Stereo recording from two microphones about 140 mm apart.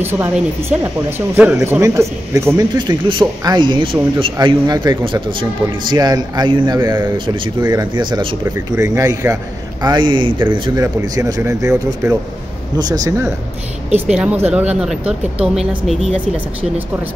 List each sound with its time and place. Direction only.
0.0 s speech: 15° right (ahead or behind)
2.9 s speech: 35° right (ahead or behind)
8.5 s a man's voice: 20° right (ahead or behind)
10.8 s a man's voice: 25° right (ahead or behind)
13.9 s a woman's voice: 5° right (ahead or behind)